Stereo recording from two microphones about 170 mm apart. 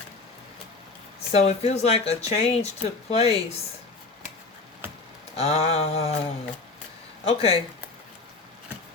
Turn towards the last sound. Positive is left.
turn(degrees=35)  # may be behind; listen again after turning